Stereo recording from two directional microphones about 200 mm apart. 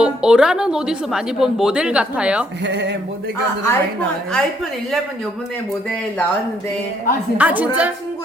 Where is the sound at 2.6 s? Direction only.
60° right (ahead or behind).